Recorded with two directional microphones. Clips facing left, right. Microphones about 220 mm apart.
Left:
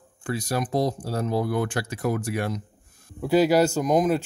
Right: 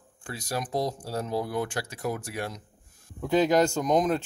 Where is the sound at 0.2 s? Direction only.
65° left (ahead or behind).